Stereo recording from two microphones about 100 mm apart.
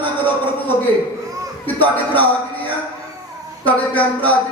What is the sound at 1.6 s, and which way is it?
Speech, 15° left (ahead or behind).